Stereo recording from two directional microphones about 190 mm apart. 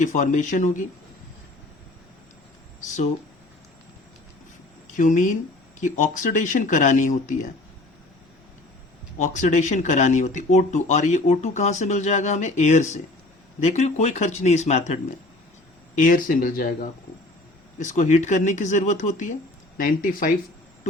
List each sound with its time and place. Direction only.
0.0 s speech: 40° left (ahead or behind)
4.9 s speech: 40° left (ahead or behind)
9.1 s speech: 40° left (ahead or behind)
16.0 s speech: 45° left (ahead or behind)
17.7 s speech: 40° left (ahead or behind)